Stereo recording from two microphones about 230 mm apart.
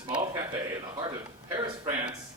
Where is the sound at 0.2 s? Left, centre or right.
Centre.